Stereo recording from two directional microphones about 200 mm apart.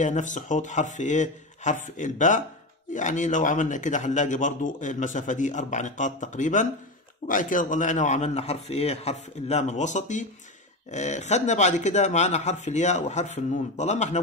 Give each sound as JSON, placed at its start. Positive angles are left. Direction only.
{"t": 0.0, "sound": "a man's voice", "side_deg": 40}